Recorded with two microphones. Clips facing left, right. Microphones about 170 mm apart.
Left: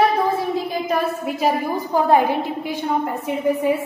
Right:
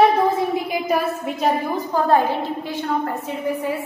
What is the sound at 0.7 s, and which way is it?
Speech, 10° right (ahead or behind).